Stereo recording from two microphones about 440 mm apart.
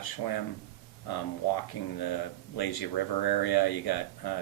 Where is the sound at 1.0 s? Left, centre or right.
Left.